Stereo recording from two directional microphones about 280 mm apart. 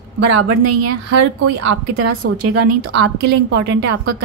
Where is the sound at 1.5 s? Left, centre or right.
Right.